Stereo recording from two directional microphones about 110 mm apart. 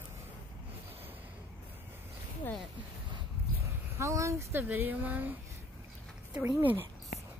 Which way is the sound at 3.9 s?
25° right (ahead or behind).